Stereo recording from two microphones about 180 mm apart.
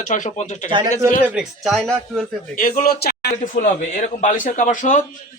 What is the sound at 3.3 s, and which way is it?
Speech, 45° left (ahead or behind).